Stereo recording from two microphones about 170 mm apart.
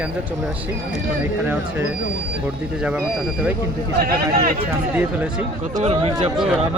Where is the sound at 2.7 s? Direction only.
5° right (ahead or behind).